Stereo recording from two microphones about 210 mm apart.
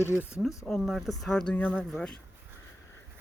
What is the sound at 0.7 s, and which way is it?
Speech, centre (ahead or behind).